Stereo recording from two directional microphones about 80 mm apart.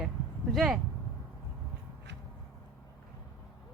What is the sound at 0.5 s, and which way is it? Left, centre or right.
Speech, centre.